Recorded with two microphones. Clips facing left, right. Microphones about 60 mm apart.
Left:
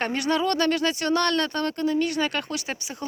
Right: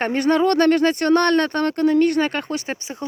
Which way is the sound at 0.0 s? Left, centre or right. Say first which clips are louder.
Right 6 dB; right.